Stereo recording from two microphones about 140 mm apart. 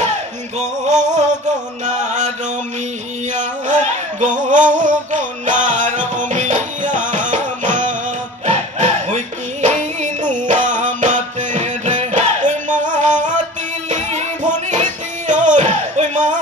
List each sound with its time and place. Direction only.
0.6 s music: 60° right (ahead or behind)
3.3 s a sound: 60° right (ahead or behind)
8.5 s music: 60° right (ahead or behind)